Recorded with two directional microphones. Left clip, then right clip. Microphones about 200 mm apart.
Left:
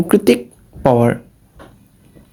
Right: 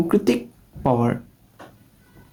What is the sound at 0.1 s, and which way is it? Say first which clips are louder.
Speech: left 11 dB; 35° left (ahead or behind).